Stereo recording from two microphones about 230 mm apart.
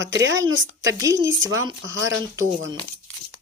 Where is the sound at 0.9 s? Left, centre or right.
Centre.